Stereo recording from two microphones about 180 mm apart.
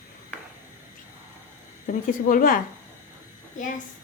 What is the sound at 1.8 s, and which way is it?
Speech, 45° left (ahead or behind).